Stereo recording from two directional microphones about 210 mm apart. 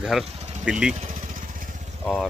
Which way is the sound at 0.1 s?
Centre (ahead or behind).